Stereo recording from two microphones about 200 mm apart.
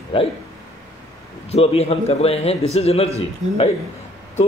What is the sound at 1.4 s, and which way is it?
A man's voice, 30° left (ahead or behind).